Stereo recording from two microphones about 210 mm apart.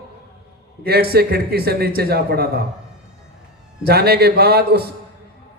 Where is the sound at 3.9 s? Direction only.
50° right (ahead or behind).